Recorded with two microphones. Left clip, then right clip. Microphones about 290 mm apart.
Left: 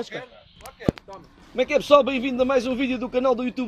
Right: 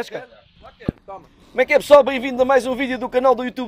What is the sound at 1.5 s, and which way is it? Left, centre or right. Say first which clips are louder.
A man's voice: right 5 dB; right.